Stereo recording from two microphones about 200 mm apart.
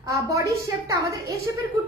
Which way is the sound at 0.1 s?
15° right (ahead or behind).